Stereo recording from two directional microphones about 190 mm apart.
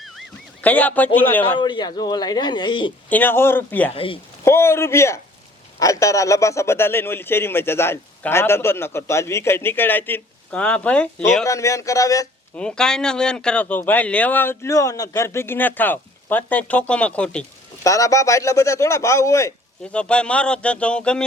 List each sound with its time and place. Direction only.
0.0 s a sound: centre (ahead or behind)
1.5 s speech: 25° left (ahead or behind)
3.1 s a man's voice: 10° left (ahead or behind)
3.9 s speech: 30° left (ahead or behind)
4.4 s a man's voice: 15° left (ahead or behind)
11.4 s a man's voice: 15° left (ahead or behind)
12.5 s a man's voice: 5° left (ahead or behind)
17.8 s a man's voice: 15° left (ahead or behind)
19.9 s speech: 5° left (ahead or behind)